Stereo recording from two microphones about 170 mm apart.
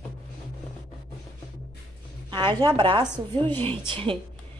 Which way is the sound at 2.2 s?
30° right (ahead or behind).